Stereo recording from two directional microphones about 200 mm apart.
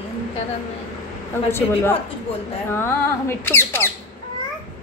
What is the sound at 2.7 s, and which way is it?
Squawk, 10° left (ahead or behind).